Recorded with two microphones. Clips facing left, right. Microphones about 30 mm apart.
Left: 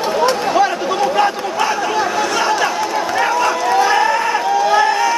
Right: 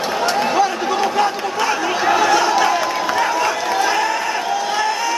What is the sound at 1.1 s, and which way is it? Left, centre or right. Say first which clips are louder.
Chatter: left 2 dB; centre.